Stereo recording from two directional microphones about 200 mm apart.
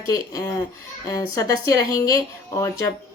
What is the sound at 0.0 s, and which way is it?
Speech, 15° left (ahead or behind).